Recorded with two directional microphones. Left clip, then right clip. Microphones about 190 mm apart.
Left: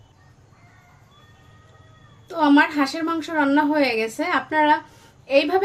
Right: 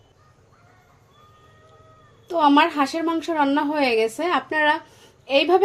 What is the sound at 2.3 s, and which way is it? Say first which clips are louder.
A woman's voice: right 1 dB; 25° right (ahead or behind).